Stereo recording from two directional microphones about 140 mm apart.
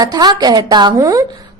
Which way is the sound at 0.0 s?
30° right (ahead or behind).